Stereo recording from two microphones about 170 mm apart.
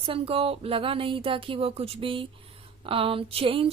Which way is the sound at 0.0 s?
35° right (ahead or behind).